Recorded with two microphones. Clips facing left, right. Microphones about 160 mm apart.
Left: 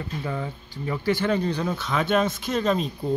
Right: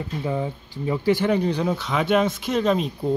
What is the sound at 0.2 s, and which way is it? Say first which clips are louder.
Speech: right 7 dB; 15° right (ahead or behind).